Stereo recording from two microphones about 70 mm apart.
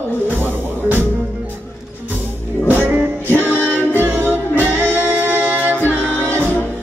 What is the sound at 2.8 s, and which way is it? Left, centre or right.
Music, right.